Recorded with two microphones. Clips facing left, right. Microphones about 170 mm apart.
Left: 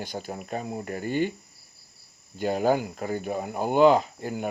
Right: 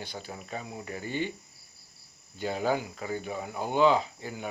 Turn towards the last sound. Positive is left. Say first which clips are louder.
# left 6 dB
turn(degrees=50)  # may be behind; listen again after turning